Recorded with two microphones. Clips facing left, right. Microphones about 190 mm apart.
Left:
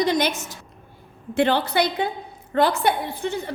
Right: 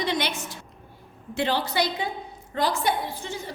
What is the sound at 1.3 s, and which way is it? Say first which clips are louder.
A woman's voice: left 6 dB; 55° left (ahead or behind).